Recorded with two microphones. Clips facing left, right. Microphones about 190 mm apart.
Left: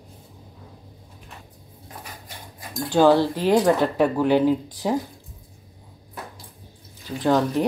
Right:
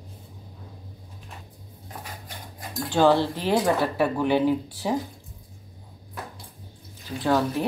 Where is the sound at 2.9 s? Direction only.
15° left (ahead or behind).